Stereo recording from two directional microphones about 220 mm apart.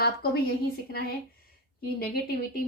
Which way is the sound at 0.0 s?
45° left (ahead or behind).